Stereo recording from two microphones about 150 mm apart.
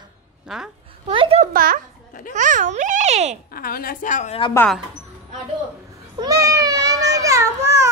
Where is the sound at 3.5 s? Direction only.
80° left; by 4.3 s 60° left (ahead or behind).